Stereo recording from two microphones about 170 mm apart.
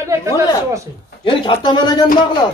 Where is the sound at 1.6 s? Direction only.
25° left (ahead or behind).